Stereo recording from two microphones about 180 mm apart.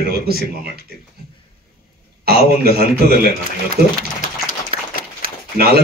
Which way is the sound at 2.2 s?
60° right (ahead or behind).